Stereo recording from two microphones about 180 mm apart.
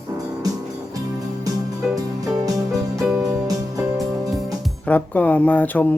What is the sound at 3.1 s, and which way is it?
Music, 15° right (ahead or behind).